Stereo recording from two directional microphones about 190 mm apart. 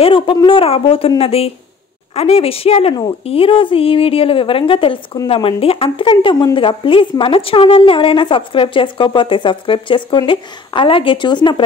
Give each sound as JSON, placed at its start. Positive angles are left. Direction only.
{"t": 0.0, "sound": "a woman's voice", "side_deg": 25}